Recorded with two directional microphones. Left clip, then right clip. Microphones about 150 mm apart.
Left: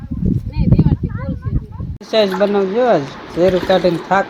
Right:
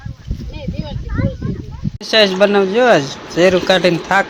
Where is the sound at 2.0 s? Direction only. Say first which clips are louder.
Right 3 dB; 5° right (ahead or behind).